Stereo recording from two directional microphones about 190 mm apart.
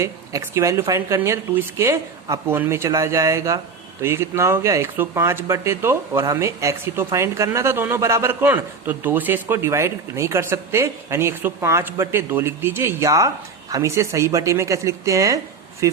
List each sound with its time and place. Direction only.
0.0 s speech: 15° right (ahead or behind)